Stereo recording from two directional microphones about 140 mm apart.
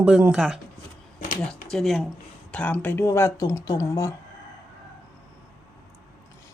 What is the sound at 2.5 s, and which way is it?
Speech, 10° left (ahead or behind).